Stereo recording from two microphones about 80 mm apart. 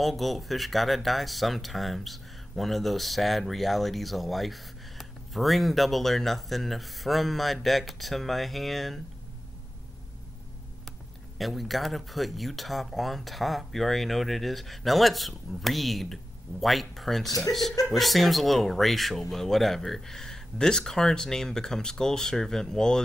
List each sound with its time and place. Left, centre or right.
0.0 s speech: centre
10.9 s speech: centre